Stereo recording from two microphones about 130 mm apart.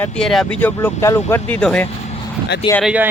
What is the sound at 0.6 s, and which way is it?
Speech, 15° left (ahead or behind).